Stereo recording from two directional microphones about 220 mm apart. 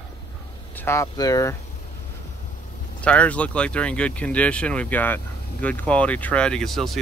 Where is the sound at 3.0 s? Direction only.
5° left (ahead or behind).